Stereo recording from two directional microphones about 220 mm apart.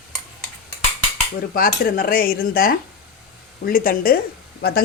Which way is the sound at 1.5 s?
40° left (ahead or behind).